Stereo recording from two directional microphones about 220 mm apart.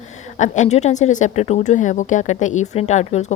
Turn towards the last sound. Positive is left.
turn(degrees=30)  # may be behind; listen again after turning